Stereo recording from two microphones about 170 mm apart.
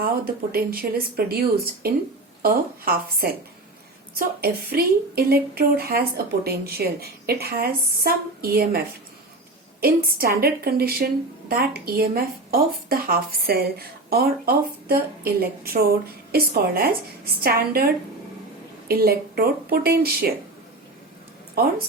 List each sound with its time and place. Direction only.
0.5 s a woman's voice: 60° right (ahead or behind)
9.8 s a woman's voice: 65° right (ahead or behind)
18.9 s a woman's voice: 65° right (ahead or behind)